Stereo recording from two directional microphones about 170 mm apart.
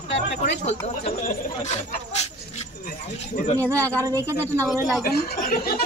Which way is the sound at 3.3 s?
40° left (ahead or behind).